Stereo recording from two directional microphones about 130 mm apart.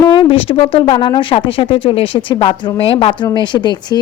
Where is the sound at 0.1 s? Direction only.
40° left (ahead or behind).